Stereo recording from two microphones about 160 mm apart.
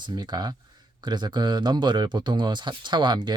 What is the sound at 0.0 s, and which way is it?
Speech, 25° right (ahead or behind).